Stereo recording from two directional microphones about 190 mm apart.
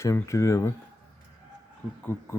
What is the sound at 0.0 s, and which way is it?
Speech, 15° left (ahead or behind).